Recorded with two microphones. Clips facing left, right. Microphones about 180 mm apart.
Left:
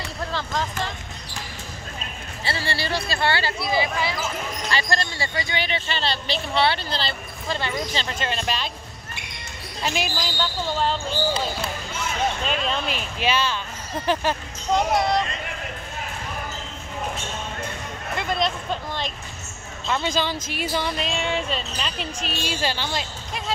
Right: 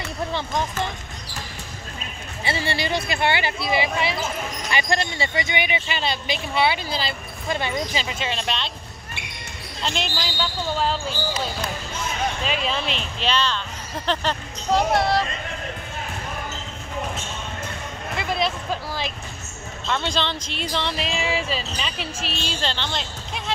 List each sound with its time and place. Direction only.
0.3 s speech: 20° right (ahead or behind)
2.4 s speech: 20° right (ahead or behind); by 8.7 s 5° left (ahead or behind)
9.8 s speech: 5° left (ahead or behind)
12.4 s speech: centre (ahead or behind)
14.7 s speech: centre (ahead or behind)
18.1 s speech: 5° right (ahead or behind)
19.9 s speech: 5° left (ahead or behind)
22.5 s speech: 10° left (ahead or behind)